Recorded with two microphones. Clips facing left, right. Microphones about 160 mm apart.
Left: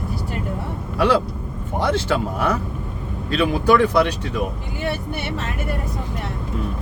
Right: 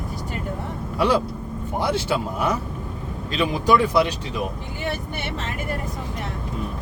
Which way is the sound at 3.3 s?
65° left (ahead or behind).